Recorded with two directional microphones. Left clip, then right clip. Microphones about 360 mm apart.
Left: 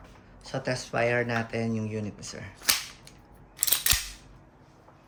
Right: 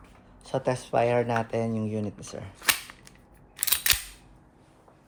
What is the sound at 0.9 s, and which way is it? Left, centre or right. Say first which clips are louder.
Speech: right 2 dB; centre.